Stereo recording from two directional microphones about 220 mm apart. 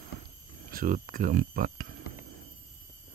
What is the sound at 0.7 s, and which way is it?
Speech, 40° right (ahead or behind).